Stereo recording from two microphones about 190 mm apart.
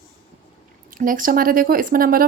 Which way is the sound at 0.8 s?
45° right (ahead or behind).